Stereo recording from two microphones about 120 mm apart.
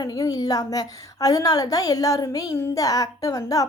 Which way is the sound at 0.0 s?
30° left (ahead or behind).